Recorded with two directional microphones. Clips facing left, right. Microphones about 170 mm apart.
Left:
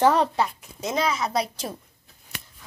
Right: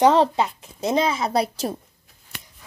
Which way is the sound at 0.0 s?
20° right (ahead or behind).